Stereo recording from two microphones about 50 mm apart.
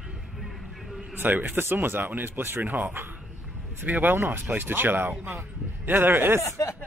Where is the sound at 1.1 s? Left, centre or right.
Right.